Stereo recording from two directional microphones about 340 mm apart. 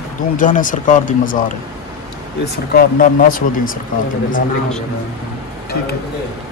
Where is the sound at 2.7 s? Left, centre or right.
Left.